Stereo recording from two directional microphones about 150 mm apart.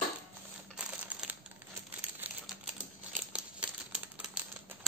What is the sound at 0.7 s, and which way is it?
Crumpling, 5° right (ahead or behind).